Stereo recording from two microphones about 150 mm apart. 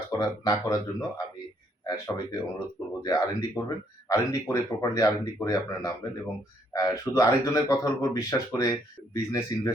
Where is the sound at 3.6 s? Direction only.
15° left (ahead or behind).